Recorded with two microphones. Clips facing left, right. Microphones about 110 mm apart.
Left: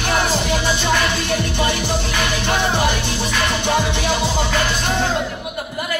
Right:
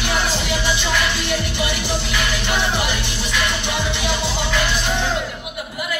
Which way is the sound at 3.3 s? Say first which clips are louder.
Left 4 dB; 40° left (ahead or behind).